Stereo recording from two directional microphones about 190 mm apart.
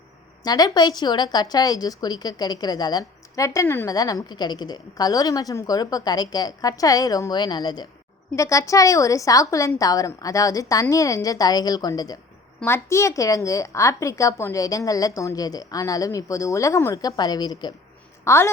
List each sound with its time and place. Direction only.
0.4 s a woman's voice: 20° left (ahead or behind)